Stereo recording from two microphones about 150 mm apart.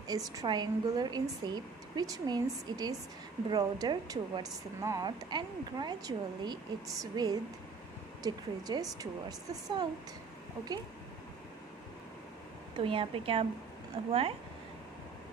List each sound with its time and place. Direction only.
0.1 s a woman's voice: 25° right (ahead or behind)
12.7 s speech: 35° right (ahead or behind)